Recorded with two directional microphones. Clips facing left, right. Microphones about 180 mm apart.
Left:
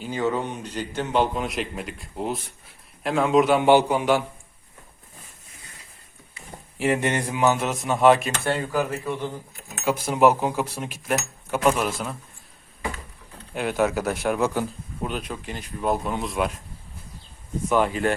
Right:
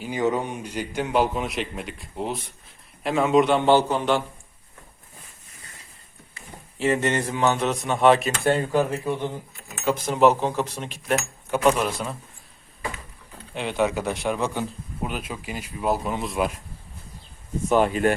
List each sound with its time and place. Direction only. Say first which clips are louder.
0.0 s a man's voice: right 1 dB; 15° right (ahead or behind); by 4.2 s 10° left (ahead or behind)
6.7 s a man's voice: right 1 dB; 15° left (ahead or behind)
8.4 s speech: right 4 dB; 25° right (ahead or behind)
8.9 s speech: right 2 dB; 10° right (ahead or behind)
9.8 s a man's voice: even; 10° left (ahead or behind)
13.5 s a man's voice: left 1 dB; 5° left (ahead or behind)
15.0 s a man's voice: left 1 dB; 5° right (ahead or behind)
17.7 s speech: right 2 dB; 25° right (ahead or behind)